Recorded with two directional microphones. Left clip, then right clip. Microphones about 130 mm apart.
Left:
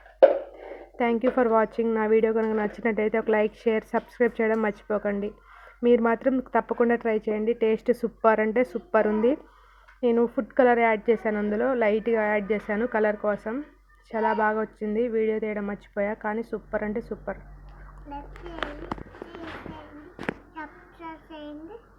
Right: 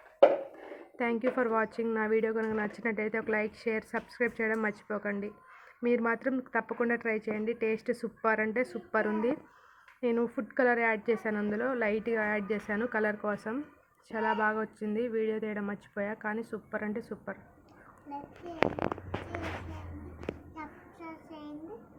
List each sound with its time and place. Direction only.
1.4 s speech: 40° left (ahead or behind)
20.6 s child singing: 20° right (ahead or behind)